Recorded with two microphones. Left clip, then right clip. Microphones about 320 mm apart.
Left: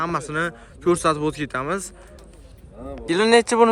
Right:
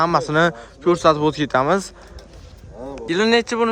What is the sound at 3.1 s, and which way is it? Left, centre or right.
Speech, centre.